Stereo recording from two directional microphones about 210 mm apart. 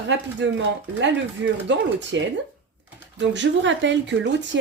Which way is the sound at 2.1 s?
60° right (ahead or behind).